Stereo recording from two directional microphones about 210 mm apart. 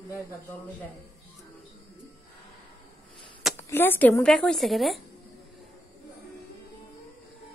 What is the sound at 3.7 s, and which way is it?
A woman's voice, 10° left (ahead or behind).